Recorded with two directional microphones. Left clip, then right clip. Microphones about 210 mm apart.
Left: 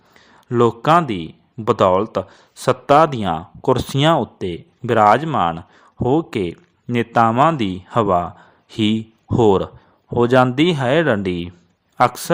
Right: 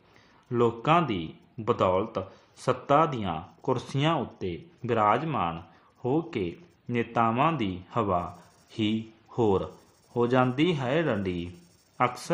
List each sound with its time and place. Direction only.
0.4 s speech: 45° left (ahead or behind)